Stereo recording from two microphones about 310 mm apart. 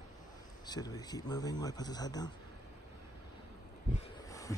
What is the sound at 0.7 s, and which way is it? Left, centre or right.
Speech, centre.